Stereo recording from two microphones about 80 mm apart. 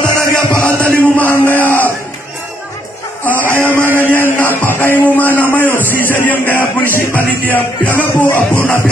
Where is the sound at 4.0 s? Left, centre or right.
Left.